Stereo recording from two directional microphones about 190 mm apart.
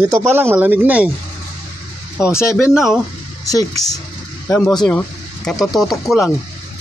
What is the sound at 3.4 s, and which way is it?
Speech, 20° left (ahead or behind).